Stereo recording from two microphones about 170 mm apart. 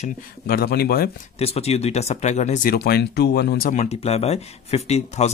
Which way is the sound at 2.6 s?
65° left (ahead or behind).